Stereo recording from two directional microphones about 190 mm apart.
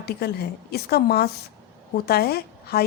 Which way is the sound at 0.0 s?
55° left (ahead or behind).